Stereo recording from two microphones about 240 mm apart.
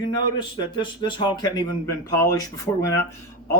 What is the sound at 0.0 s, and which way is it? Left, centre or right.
Speech, centre.